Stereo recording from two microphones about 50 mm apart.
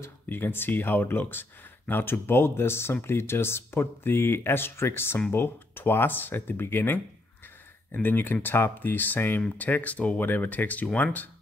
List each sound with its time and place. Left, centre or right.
0.3 s speech: left
9.6 s speech: left